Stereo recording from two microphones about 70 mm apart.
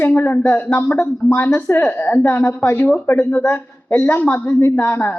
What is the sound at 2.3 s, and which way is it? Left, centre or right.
Speech, left.